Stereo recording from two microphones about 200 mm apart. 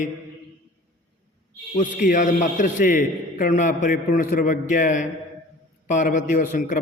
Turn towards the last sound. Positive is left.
turn(degrees=40)  # may be behind; listen again after turning